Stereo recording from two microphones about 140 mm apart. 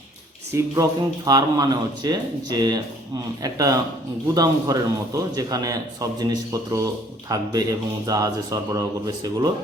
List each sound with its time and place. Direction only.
0.5 s a man's voice: 25° right (ahead or behind)